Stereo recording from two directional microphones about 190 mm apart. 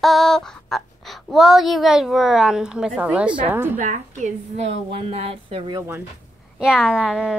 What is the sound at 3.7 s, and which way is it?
A woman's voice, 40° right (ahead or behind).